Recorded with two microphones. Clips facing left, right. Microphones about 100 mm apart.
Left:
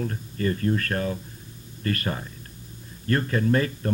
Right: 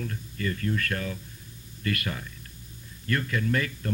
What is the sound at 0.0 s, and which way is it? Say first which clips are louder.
Speech: left 5 dB; 35° left (ahead or behind).